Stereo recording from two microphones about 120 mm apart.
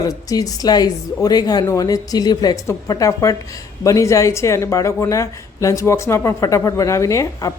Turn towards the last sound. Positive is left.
turn(degrees=25)  # may be behind; listen again after turning